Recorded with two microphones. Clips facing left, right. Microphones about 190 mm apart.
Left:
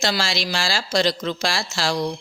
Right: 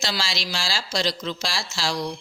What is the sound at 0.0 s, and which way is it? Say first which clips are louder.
Speech: left 5 dB; 55° left (ahead or behind).